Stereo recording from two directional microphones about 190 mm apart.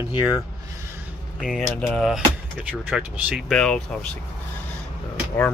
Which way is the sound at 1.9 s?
Centre (ahead or behind).